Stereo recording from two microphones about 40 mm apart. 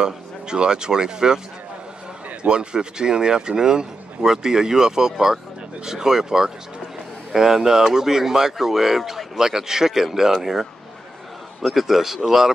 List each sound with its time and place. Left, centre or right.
0.0 s speech: centre
2.4 s speech: right